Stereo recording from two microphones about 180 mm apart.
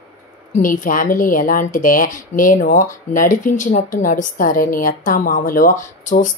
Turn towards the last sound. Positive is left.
turn(degrees=45)  # may be behind; listen again after turning